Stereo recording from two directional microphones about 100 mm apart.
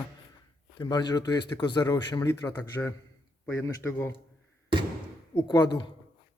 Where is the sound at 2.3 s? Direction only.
30° left (ahead or behind).